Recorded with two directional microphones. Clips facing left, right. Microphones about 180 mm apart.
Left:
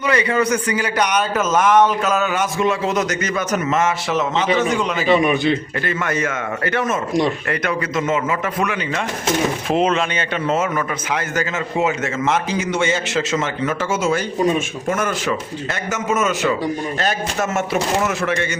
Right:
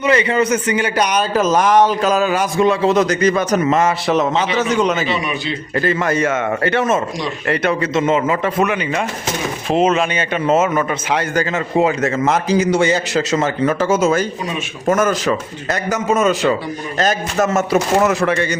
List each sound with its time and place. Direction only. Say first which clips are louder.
0.0 s a man's voice: right 3 dB; 25° right (ahead or behind); by 5.0 s 40° right (ahead or behind)
5.0 s a man's voice: left 6 dB; 50° left (ahead or behind)
5.8 s a man's voice: right 5 dB; 35° right (ahead or behind)
9.6 s speech: right 6 dB; centre (ahead or behind)
10.4 s a man's voice: right 6 dB; 20° right (ahead or behind)